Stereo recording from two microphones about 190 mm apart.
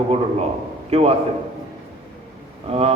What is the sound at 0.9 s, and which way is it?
Speech, 30° right (ahead or behind).